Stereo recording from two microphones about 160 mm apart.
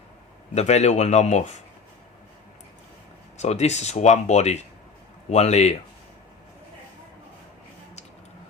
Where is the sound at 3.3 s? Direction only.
45° left (ahead or behind).